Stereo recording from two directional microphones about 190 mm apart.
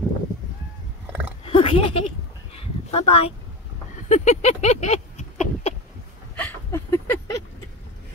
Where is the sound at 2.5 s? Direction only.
30° left (ahead or behind).